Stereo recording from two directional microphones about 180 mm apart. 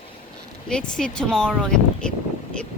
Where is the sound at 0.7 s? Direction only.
5° left (ahead or behind).